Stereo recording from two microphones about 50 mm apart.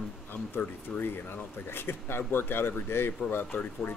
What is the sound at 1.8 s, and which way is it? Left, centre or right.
Speech, left.